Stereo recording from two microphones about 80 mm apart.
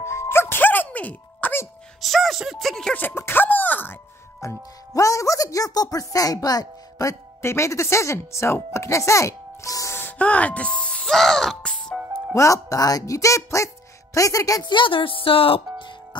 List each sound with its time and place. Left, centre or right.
0.0 s music: left
2.0 s speech: centre
2.9 s a sound: left
4.4 s speech: left
9.9 s music: centre
12.4 s speech: left
14.6 s speech: left
15.8 s music: left